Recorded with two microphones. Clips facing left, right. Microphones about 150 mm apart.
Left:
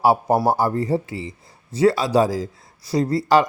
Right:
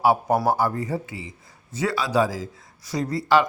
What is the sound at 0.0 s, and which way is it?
A man's voice, 35° left (ahead or behind).